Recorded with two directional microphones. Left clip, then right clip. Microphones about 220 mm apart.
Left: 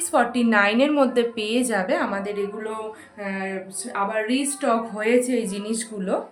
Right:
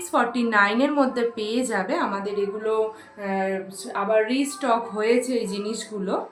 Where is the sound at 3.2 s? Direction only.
35° left (ahead or behind).